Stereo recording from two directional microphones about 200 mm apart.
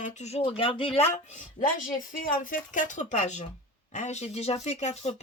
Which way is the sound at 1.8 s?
45° left (ahead or behind).